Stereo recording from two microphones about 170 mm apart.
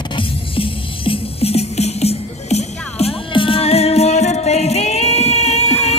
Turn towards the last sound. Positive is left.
turn(degrees=40)  # may be behind; listen again after turning